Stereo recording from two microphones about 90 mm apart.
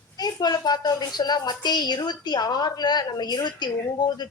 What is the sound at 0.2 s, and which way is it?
Speech, 45° left (ahead or behind).